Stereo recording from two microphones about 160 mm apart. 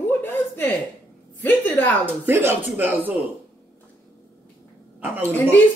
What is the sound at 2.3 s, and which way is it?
Speech, 15° right (ahead or behind).